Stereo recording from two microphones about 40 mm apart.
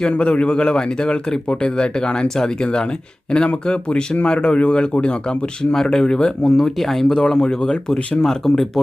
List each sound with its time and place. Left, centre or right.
0.0 s a man's voice: left
5.7 s speech: centre
8.2 s speech: centre